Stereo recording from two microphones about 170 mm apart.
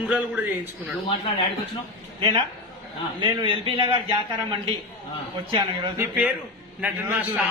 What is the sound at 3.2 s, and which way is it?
Speech, 30° right (ahead or behind).